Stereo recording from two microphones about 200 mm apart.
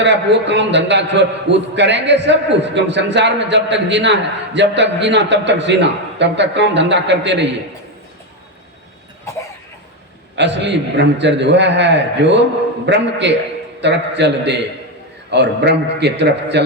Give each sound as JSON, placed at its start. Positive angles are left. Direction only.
{"t": 0.0, "sound": "a man's voice", "side_deg": -60}
{"t": 10.3, "sound": "a man's voice", "side_deg": -60}